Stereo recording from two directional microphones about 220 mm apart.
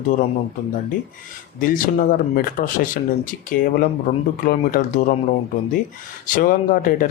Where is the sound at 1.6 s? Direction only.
40° left (ahead or behind).